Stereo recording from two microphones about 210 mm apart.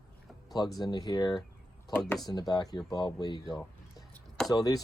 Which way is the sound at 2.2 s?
20° left (ahead or behind).